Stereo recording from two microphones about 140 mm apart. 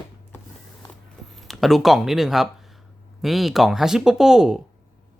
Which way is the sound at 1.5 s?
Centre (ahead or behind).